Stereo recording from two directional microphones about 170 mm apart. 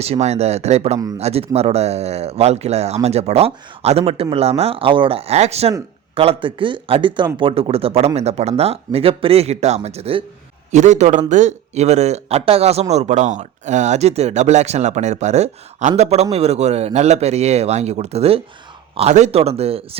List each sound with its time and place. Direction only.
0.0 s a man's voice: 40° right (ahead or behind)